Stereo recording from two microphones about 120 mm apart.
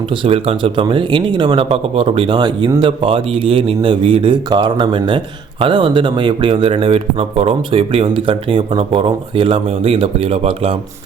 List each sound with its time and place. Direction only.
0.1 s a man's voice: 50° right (ahead or behind)